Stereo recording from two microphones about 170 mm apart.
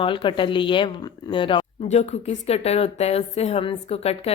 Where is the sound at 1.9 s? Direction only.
40° left (ahead or behind).